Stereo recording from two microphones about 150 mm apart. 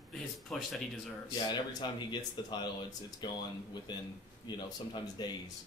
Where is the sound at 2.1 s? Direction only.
30° left (ahead or behind).